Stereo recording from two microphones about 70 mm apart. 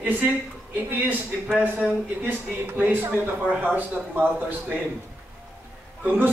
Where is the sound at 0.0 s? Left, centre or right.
Right.